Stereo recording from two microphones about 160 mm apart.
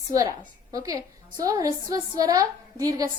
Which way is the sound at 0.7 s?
20° right (ahead or behind).